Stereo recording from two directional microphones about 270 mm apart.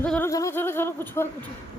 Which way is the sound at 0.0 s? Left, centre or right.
Centre.